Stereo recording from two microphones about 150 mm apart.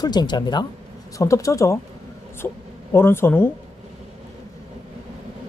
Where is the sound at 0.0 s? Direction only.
30° left (ahead or behind).